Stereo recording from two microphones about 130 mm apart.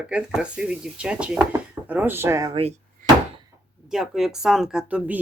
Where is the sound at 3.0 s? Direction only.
90° right.